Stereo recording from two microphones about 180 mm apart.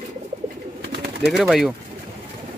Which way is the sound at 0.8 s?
65° right (ahead or behind).